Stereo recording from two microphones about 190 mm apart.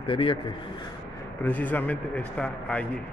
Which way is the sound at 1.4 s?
10° left (ahead or behind).